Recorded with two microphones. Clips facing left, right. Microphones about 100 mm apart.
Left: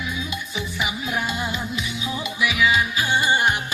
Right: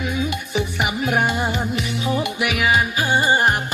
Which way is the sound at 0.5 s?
60° right (ahead or behind).